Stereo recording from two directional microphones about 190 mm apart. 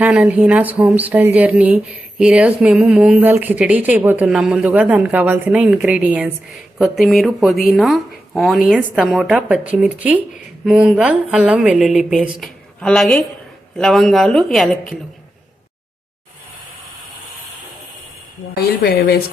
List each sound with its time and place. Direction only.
0.0 s a woman's voice: 5° right (ahead or behind)
18.5 s speech: 55° left (ahead or behind)